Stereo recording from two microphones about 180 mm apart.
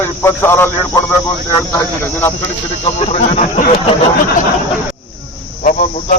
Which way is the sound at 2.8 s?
35° left (ahead or behind).